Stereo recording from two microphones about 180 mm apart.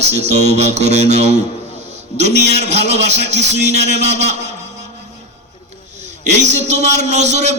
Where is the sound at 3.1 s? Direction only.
70° right (ahead or behind).